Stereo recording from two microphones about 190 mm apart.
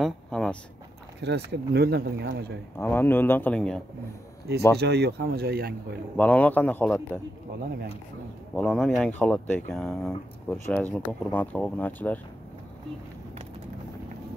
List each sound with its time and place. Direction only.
0.0 s a sound: 5° left (ahead or behind)
1.2 s speech: 60° right (ahead or behind)
2.8 s speech: 10° left (ahead or behind)
4.7 s speech: 60° right (ahead or behind)
6.1 s speech: 5° left (ahead or behind)
8.5 s speech: centre (ahead or behind)